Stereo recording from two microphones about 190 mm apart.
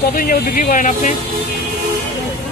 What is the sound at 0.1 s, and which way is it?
Speech, 50° left (ahead or behind).